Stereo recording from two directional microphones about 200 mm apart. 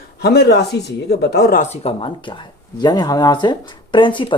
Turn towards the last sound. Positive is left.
turn(degrees=25)  # may be behind; listen again after turning